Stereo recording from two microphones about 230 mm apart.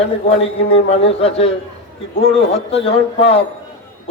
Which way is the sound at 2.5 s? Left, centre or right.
Left.